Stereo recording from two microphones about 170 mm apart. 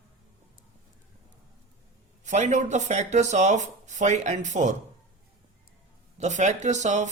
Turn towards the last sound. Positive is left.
turn(degrees=-45)  # may be behind; listen again after turning